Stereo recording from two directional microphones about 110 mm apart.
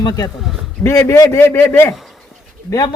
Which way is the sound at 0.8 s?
25° left (ahead or behind).